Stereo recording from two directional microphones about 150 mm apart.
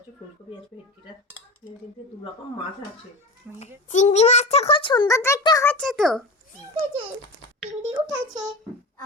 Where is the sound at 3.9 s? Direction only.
50° left (ahead or behind); by 5.7 s 25° left (ahead or behind).